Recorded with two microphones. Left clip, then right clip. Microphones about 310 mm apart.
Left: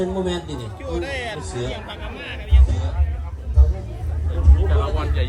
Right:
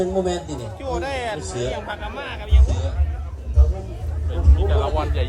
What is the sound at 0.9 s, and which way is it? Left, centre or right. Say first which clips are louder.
Speech: right 2 dB; right.